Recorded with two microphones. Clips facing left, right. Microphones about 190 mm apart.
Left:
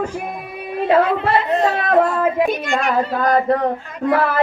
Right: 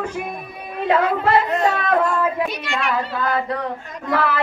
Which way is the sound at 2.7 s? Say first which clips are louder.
Left 5 dB; 45° left (ahead or behind).